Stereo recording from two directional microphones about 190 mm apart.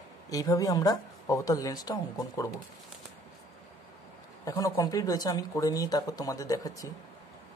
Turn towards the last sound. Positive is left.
turn(degrees=20)  # may be behind; listen again after turning